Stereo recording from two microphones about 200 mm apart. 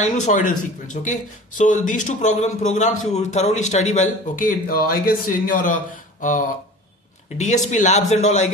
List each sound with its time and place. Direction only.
0.0 s speech: 40° left (ahead or behind)
7.3 s speech: 35° left (ahead or behind)